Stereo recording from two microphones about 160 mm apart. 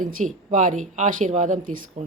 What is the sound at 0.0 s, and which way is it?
Speech, 55° right (ahead or behind).